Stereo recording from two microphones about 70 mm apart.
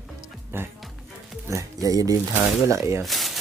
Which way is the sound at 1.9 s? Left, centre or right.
Right.